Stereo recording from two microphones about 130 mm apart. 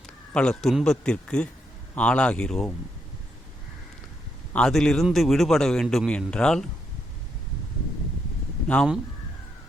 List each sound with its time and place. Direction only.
0.3 s a man's voice: 5° left (ahead or behind)
4.5 s a man's voice: 5° left (ahead or behind)
8.6 s speech: 10° left (ahead or behind)